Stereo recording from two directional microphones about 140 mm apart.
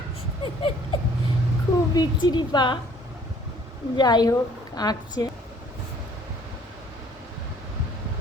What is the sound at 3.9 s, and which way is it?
Speech, 30° left (ahead or behind).